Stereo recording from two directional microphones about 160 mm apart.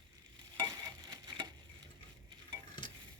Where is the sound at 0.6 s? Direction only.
25° right (ahead or behind).